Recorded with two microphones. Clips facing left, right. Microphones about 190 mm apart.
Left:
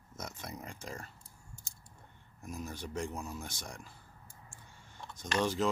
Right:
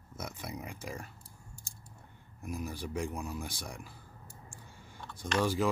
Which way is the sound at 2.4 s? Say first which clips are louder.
Right 3 dB; 15° right (ahead or behind).